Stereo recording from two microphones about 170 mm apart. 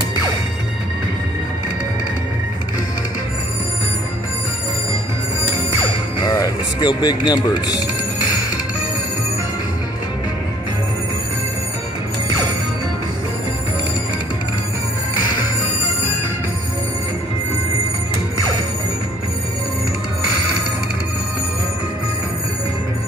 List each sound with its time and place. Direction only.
6.2 s speech: 25° left (ahead or behind)